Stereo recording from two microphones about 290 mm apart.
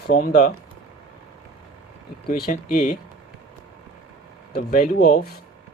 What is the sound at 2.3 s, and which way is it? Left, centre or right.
Speech, left.